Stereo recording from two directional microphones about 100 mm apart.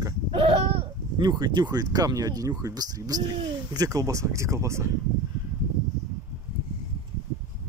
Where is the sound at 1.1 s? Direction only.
45° right (ahead or behind).